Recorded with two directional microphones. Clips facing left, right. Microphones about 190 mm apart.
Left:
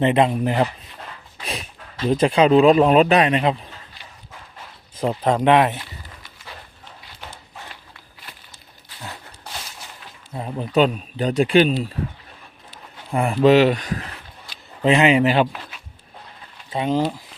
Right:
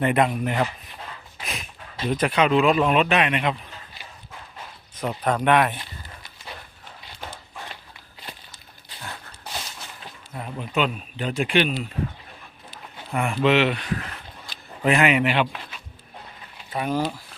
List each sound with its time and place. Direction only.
0.0 s speech: 25° left (ahead or behind)
2.0 s speech: 30° left (ahead or behind)
4.9 s speech: 25° left (ahead or behind)
10.3 s speech: 30° left (ahead or behind)
13.1 s speech: 35° left (ahead or behind)
14.8 s speech: 25° left (ahead or behind)
16.6 s speech: 25° left (ahead or behind)